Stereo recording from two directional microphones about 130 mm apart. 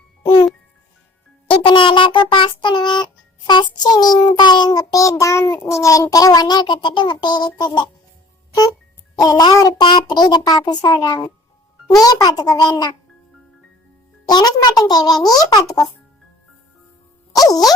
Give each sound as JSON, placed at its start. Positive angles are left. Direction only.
{"t": 0.2, "sound": "a child's voice", "side_deg": 40}
{"t": 1.6, "sound": "child singing", "side_deg": 40}
{"t": 9.1, "sound": "child singing", "side_deg": 30}
{"t": 11.9, "sound": "a child's voice", "side_deg": 30}
{"t": 14.3, "sound": "a child's voice", "side_deg": 30}
{"t": 17.3, "sound": "a child's voice", "side_deg": 30}